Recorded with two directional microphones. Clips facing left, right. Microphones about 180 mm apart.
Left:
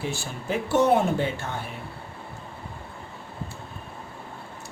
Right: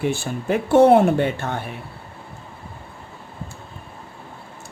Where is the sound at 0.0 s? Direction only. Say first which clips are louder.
Right 8 dB; 55° right (ahead or behind).